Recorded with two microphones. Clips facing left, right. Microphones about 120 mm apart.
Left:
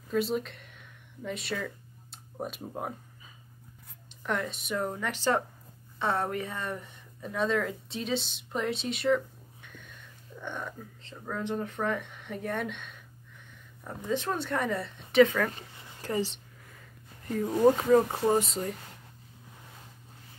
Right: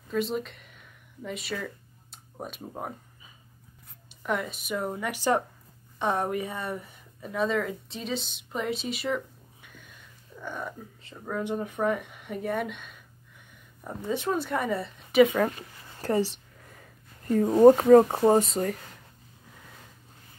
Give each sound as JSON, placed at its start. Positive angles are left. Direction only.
{"t": 0.1, "sound": "a sound", "side_deg": 0}
{"t": 4.3, "sound": "speech", "side_deg": -5}
{"t": 15.2, "sound": "speech", "side_deg": -25}
{"t": 17.3, "sound": "speech", "side_deg": -40}
{"t": 18.1, "sound": "speech", "side_deg": -30}
{"t": 18.4, "sound": "speech", "side_deg": -55}